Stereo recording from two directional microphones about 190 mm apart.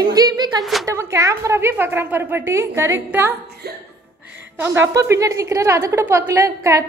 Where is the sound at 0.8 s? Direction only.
15° right (ahead or behind).